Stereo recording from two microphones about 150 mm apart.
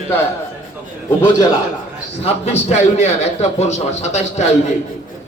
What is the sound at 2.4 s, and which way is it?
A man's voice, 45° left (ahead or behind).